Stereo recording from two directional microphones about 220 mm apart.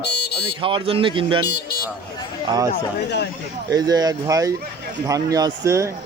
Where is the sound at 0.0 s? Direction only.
50° left (ahead or behind).